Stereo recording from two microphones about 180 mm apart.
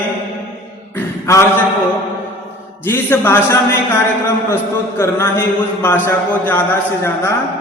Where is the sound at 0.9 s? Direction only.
15° left (ahead or behind).